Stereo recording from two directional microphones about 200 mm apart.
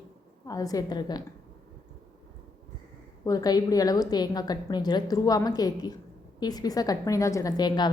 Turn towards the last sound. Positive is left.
turn(degrees=20)  # may be behind; listen again after turning